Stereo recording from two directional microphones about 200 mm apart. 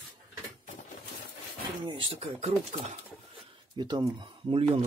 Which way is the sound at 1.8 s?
25° right (ahead or behind).